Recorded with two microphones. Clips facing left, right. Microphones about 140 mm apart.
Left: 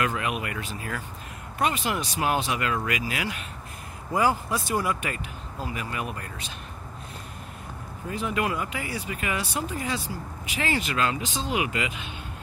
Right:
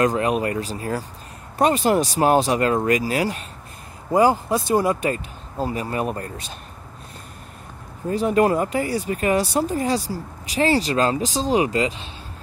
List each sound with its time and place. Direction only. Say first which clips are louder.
0.0 s speech: right 8 dB; 35° right (ahead or behind)
8.1 s speech: right 10 dB; 40° right (ahead or behind)